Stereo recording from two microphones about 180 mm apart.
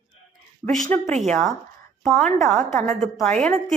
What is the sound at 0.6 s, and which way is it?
Speech, 5° left (ahead or behind).